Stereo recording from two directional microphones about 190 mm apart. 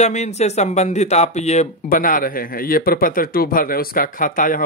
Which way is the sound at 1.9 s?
45° left (ahead or behind).